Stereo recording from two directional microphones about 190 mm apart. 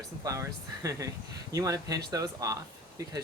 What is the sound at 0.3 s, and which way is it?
Speech, 15° right (ahead or behind).